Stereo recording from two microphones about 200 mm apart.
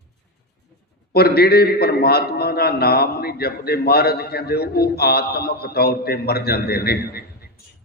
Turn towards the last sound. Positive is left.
turn(degrees=50)  # may be behind; listen again after turning